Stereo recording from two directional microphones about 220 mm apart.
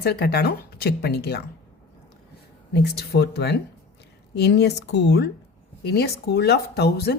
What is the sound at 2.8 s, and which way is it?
A woman's voice, 45° left (ahead or behind).